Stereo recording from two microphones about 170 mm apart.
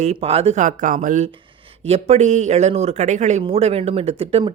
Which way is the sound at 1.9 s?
35° right (ahead or behind).